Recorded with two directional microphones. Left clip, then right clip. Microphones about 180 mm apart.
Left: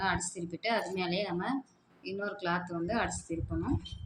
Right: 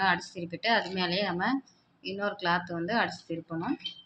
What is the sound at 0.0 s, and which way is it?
Speech, 35° right (ahead or behind).